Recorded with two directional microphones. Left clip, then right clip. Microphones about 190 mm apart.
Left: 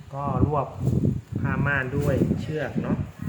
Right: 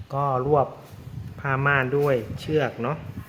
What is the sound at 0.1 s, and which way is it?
Speech, 45° right (ahead or behind).